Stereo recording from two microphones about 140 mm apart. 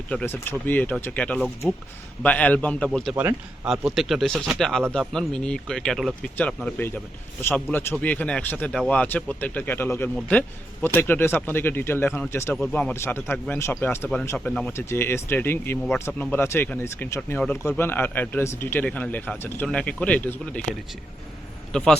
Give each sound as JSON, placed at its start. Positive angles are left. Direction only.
{"t": 0.1, "sound": "speech", "side_deg": 10}
{"t": 3.2, "sound": "speech", "side_deg": -15}
{"t": 3.7, "sound": "speech", "side_deg": 0}
{"t": 7.4, "sound": "speech", "side_deg": 15}
{"t": 12.5, "sound": "speech", "side_deg": 5}
{"t": 21.7, "sound": "a man's voice", "side_deg": 5}